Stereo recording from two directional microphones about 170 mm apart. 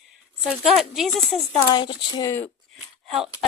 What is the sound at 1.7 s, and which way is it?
Speech, 25° left (ahead or behind).